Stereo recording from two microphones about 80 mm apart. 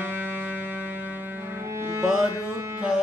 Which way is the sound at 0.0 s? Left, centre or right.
Right.